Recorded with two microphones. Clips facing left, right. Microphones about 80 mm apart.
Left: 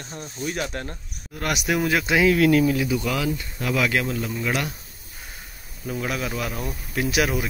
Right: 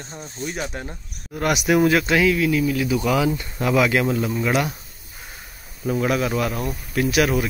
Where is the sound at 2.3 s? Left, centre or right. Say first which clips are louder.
Left 3 dB; left.